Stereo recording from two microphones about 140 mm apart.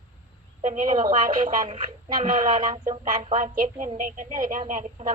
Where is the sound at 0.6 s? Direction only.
65° right (ahead or behind).